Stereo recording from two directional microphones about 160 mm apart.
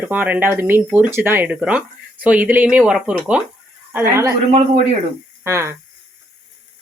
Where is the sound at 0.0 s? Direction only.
10° right (ahead or behind).